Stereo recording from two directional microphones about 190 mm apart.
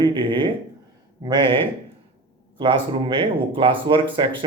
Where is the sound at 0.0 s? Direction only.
25° right (ahead or behind).